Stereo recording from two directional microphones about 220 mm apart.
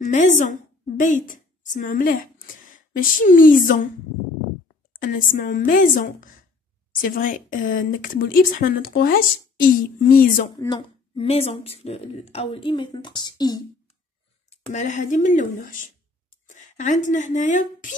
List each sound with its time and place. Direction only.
0.0 s a woman's voice: 35° left (ahead or behind)
4.9 s speech: 40° left (ahead or behind)
10.5 s speech: 20° left (ahead or behind)
14.5 s speech: 35° left (ahead or behind)